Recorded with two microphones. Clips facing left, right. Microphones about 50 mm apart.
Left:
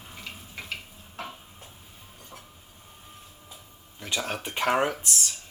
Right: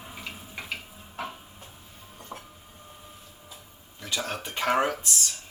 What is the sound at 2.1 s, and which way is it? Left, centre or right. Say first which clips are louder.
Train: right 7 dB; right.